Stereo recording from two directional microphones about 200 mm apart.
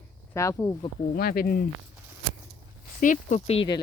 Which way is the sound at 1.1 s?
50° left (ahead or behind).